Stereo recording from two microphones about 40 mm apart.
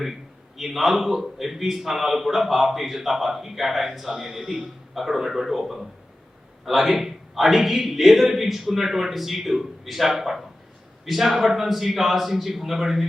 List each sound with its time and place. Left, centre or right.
0.0 s a man's voice: centre